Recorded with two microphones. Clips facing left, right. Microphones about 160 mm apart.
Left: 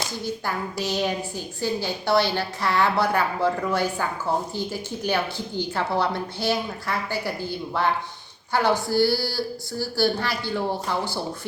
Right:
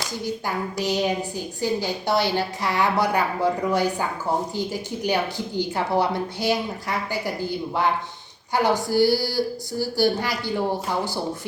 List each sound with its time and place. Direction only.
0.3 s a woman's voice: 15° right (ahead or behind)